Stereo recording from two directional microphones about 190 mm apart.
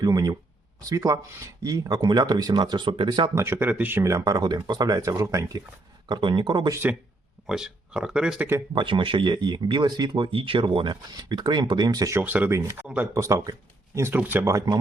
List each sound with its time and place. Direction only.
0.0 s speech: 20° right (ahead or behind)
7.4 s speech: 5° right (ahead or behind)
8.7 s speech: 25° right (ahead or behind)